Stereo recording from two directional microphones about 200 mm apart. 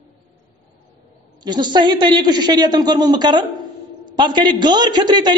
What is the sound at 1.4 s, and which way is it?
A man's voice, 20° right (ahead or behind).